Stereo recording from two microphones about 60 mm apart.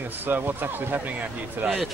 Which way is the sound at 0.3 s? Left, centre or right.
Right.